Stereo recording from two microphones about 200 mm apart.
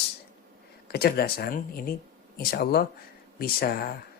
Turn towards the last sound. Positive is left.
turn(degrees=50)  # may be behind; listen again after turning